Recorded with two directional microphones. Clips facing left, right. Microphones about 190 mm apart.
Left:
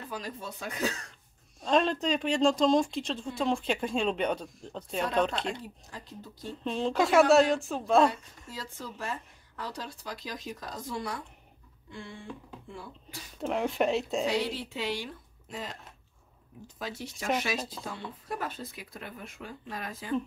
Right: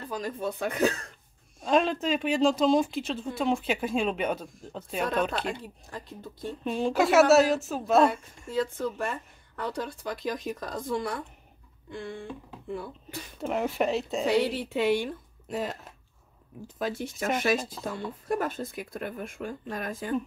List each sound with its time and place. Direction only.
0.1 s speech: 50° right (ahead or behind)
1.6 s speech: 5° right (ahead or behind)
6.6 s speech: 10° right (ahead or behind)
8.5 s speech: 55° right (ahead or behind)
13.4 s speech: centre (ahead or behind)
14.4 s speech: 55° right (ahead or behind)
16.7 s speech: 55° right (ahead or behind)